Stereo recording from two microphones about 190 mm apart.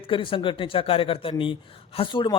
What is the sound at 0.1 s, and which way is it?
Speech, 30° left (ahead or behind).